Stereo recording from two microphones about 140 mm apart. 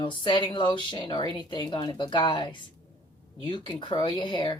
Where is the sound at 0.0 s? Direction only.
35° left (ahead or behind).